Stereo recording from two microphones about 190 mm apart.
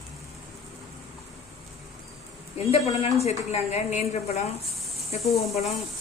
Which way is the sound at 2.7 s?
35° left (ahead or behind).